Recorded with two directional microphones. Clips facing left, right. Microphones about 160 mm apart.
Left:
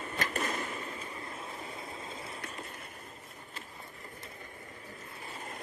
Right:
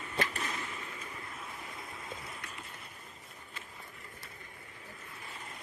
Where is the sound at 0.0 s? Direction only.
45° left (ahead or behind).